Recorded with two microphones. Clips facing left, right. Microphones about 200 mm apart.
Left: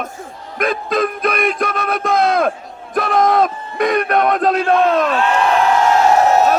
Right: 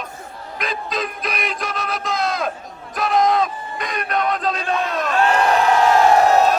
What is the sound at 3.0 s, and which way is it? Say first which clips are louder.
Crowd: left 3 dB; 55° left (ahead or behind).